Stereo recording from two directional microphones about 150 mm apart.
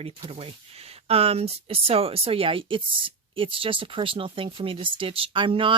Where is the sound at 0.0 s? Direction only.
40° right (ahead or behind).